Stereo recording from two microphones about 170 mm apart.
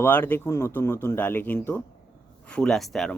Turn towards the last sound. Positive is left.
turn(degrees=0)  # may be behind; listen again after turning